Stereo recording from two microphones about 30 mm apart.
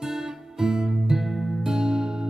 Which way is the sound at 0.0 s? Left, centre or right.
Centre.